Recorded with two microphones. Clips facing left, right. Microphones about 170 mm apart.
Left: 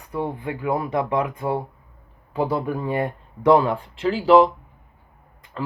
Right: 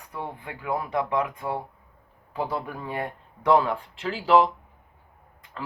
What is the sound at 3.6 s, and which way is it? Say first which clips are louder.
Speech: left 6 dB; 35° left (ahead or behind).